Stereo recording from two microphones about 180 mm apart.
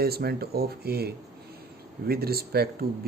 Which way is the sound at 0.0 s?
60° right (ahead or behind).